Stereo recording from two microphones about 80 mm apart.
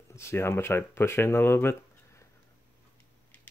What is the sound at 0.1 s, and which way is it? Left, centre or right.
Speech, left.